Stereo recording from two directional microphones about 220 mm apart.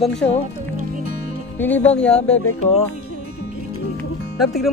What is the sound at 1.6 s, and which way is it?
Speech, 10° left (ahead or behind).